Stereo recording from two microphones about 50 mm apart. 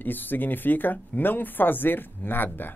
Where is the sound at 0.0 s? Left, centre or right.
Left.